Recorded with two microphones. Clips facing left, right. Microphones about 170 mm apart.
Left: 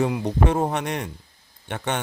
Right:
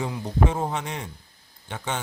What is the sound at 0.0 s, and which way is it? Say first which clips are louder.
Speech: left 4 dB; 65° left (ahead or behind).